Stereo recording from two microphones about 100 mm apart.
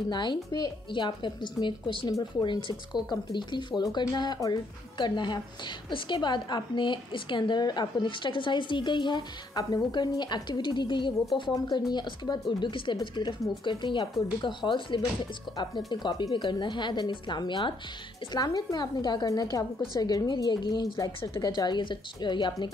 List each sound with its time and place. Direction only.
0.1 s a woman's voice: 50° left (ahead or behind)
18.3 s a woman's voice: 40° left (ahead or behind)